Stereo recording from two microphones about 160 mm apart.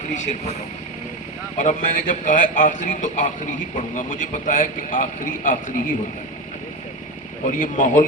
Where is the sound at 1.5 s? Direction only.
55° left (ahead or behind).